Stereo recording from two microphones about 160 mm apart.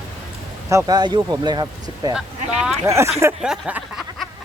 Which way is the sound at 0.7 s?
20° right (ahead or behind).